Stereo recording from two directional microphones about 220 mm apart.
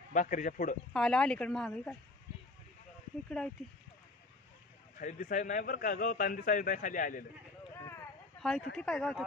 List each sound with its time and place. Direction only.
0.1 s a man's voice: 35° left (ahead or behind)
0.9 s speech: 5° left (ahead or behind)
4.9 s a man's voice: 35° left (ahead or behind)
8.4 s speech: centre (ahead or behind)